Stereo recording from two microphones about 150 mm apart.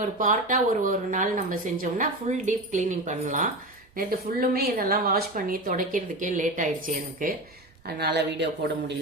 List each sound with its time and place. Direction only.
0.2 s speech: 60° right (ahead or behind)
3.9 s a woman's voice: 80° right; by 7.3 s 65° right (ahead or behind)
7.9 s a woman's voice: 90° right